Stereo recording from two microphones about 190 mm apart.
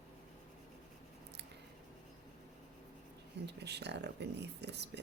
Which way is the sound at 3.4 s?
65° right (ahead or behind).